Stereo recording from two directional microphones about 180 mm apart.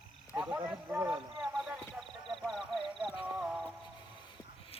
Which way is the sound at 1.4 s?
Centre (ahead or behind).